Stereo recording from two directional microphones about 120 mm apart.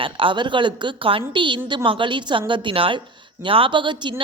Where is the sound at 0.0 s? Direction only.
45° right (ahead or behind).